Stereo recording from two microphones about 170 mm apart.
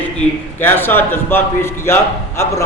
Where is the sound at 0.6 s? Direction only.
10° left (ahead or behind).